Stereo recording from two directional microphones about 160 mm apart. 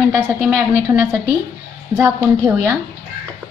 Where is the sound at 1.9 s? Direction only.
15° right (ahead or behind).